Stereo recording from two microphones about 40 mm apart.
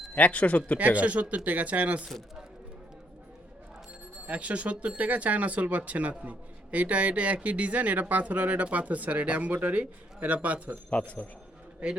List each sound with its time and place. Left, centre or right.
0.1 s speech: left
0.8 s speech: right
4.3 s a man's voice: right
11.2 s speech: left